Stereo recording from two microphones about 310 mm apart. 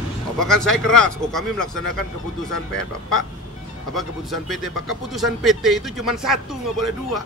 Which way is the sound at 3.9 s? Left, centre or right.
Centre.